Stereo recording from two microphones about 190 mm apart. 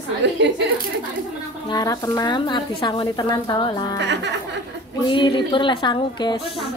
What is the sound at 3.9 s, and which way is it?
Speech, 65° right (ahead or behind).